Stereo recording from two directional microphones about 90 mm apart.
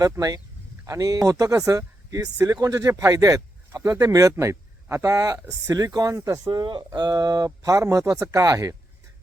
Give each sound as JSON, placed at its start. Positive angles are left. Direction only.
{"t": 0.0, "sound": "speech", "side_deg": -45}
{"t": 6.4, "sound": "speech", "side_deg": -55}